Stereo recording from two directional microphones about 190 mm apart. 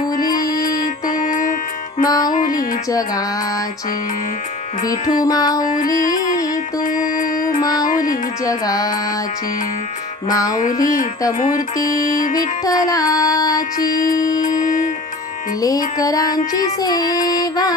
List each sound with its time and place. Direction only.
0.2 s music: 20° left (ahead or behind)
0.7 s music: 45° left (ahead or behind)
2.0 s music: 20° left (ahead or behind)
4.8 s music: 20° left (ahead or behind)
5.8 s music: 45° left (ahead or behind)
8.5 s music: 20° left (ahead or behind)
10.3 s music: 20° left (ahead or behind)
10.6 s music: 45° left (ahead or behind)
11.8 s music: 20° left (ahead or behind)
14.4 s music: 45° left (ahead or behind)
16.0 s music: 20° left (ahead or behind)